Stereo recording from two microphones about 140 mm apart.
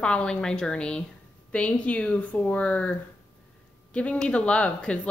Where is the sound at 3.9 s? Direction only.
10° left (ahead or behind).